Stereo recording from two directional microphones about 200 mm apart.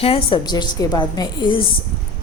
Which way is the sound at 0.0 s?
30° left (ahead or behind).